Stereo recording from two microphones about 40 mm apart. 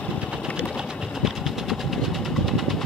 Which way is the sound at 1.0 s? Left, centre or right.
Centre.